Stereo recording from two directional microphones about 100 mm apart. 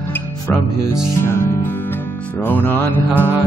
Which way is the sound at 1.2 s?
25° left (ahead or behind).